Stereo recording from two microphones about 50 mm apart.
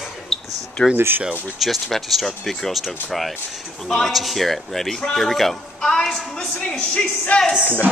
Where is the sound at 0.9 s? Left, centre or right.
Right.